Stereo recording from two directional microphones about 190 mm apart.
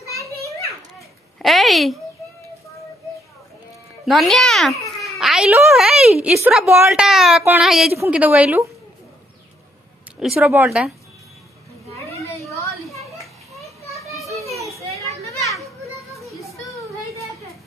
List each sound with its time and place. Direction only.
0.9 s a sound: centre (ahead or behind)
4.0 s a woman's voice: centre (ahead or behind)
10.2 s a woman's voice: 10° right (ahead or behind)
13.2 s children playing: centre (ahead or behind)
15.0 s children playing: 15° left (ahead or behind)
16.1 s a sound: centre (ahead or behind)